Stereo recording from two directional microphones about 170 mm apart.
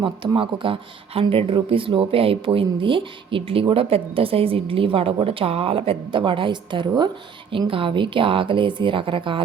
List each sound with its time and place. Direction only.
0.0 s a woman's voice: 30° right (ahead or behind)